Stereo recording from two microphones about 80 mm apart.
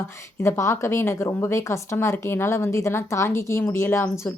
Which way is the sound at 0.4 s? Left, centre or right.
Left.